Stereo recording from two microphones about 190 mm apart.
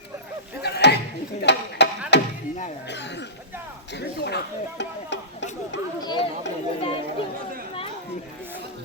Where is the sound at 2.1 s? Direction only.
60° left (ahead or behind).